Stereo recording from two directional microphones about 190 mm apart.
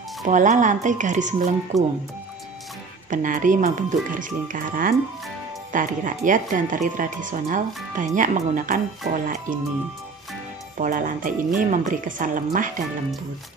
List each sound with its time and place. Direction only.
0.2 s speech: 40° right (ahead or behind)
3.1 s a woman's voice: 45° right (ahead or behind)
10.8 s a woman's voice: 45° right (ahead or behind)